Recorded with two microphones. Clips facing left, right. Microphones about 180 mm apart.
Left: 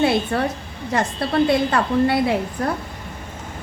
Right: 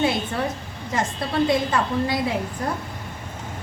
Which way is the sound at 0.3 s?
65° left (ahead or behind).